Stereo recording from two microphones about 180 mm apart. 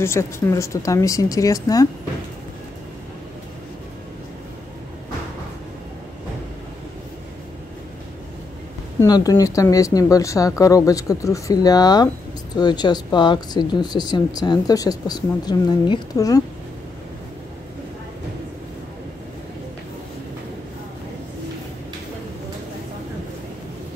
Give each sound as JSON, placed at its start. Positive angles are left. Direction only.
{"t": 0.0, "sound": "speech", "side_deg": 15}
{"t": 9.0, "sound": "speech", "side_deg": 20}